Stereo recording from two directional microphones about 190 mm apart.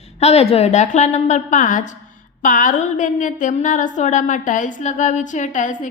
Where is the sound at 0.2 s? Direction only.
35° left (ahead or behind).